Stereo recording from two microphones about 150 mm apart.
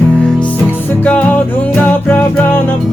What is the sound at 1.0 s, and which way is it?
Music, 10° left (ahead or behind).